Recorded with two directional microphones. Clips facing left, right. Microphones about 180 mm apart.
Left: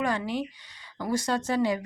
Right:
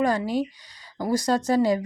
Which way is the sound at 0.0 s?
40° right (ahead or behind).